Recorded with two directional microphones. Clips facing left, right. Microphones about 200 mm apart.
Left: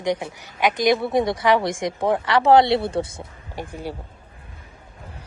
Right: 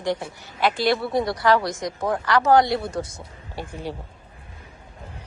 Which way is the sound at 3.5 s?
15° left (ahead or behind).